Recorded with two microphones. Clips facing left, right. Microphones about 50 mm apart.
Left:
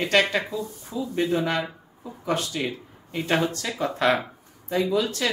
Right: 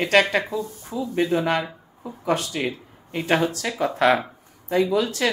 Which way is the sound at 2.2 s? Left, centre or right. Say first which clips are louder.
Right 3 dB; centre.